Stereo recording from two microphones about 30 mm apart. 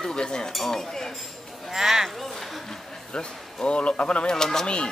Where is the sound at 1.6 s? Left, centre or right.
Centre.